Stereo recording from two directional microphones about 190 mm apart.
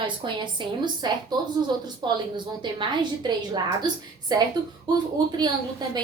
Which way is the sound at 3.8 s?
20° right (ahead or behind).